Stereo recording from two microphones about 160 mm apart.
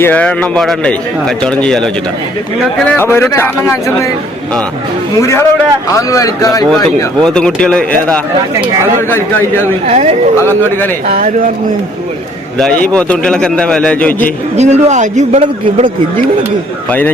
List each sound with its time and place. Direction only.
0.0 s a man's voice: 10° left (ahead or behind)
5.2 s a man's voice: 15° left (ahead or behind)
7.2 s a man's voice: 5° left (ahead or behind)
9.8 s a man's voice: 45° right (ahead or behind)
12.5 s a man's voice: 5° left (ahead or behind)
14.5 s a man's voice: 45° right (ahead or behind)